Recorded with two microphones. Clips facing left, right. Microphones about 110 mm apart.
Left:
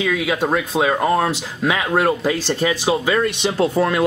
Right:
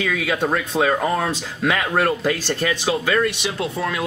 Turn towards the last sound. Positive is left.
turn(degrees=45)  # may be behind; listen again after turning